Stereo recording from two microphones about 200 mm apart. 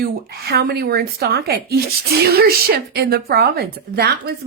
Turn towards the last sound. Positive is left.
turn(degrees=-50)  # may be behind; listen again after turning